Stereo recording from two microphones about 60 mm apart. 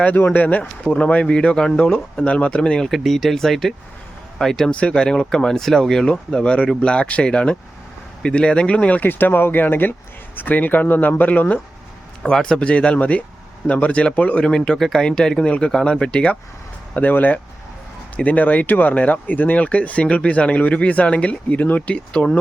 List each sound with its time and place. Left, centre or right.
0.0 s speech: left; by 2.9 s centre
2.9 s speech: centre
4.7 s speech: centre
12.2 s speech: centre